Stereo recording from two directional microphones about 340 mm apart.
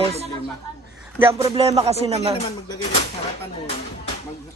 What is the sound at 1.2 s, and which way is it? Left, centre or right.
A man's voice, centre.